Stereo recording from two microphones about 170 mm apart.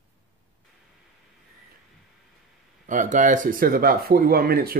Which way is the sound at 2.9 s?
50° right (ahead or behind).